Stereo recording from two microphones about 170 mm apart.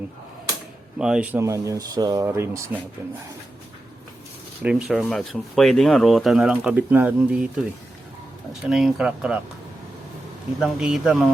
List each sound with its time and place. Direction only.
0.9 s speech: 5° right (ahead or behind)
4.6 s speech: 5° right (ahead or behind)
8.6 s speech: centre (ahead or behind)
10.6 s speech: 5° right (ahead or behind)